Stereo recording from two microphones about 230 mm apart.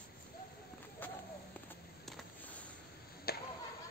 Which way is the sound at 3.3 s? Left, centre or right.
Left.